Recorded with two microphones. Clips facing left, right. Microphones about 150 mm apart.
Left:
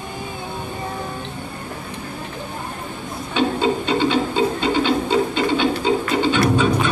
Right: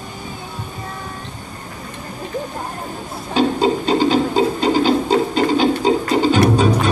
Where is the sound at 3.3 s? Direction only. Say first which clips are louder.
Right 3 dB; 35° right (ahead or behind).